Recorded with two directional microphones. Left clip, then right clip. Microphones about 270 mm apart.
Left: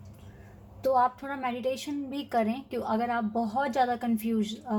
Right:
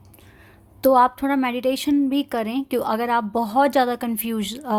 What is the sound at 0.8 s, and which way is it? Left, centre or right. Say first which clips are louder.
Speech: right 9 dB; right.